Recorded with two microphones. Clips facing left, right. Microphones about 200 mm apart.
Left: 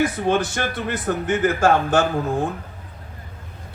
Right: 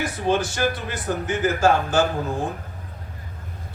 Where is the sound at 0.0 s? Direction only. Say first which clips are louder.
Left 3 dB; 55° left (ahead or behind).